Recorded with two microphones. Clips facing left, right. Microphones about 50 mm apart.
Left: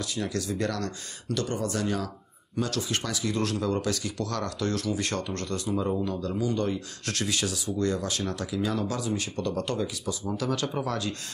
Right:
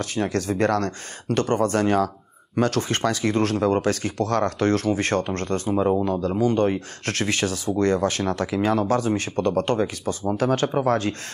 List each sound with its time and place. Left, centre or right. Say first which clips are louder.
0.0 s speech: right 6 dB; right